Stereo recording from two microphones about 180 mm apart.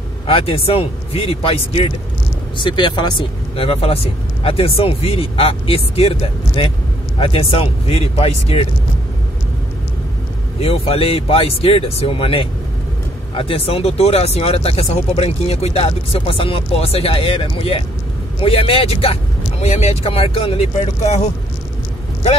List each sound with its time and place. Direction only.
0.3 s speech: 30° left (ahead or behind)
10.6 s speech: 35° left (ahead or behind)